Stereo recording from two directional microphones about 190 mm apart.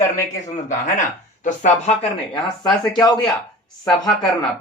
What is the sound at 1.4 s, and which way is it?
Speech, 40° left (ahead or behind).